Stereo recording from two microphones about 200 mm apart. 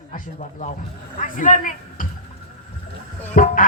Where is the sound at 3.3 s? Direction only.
40° left (ahead or behind).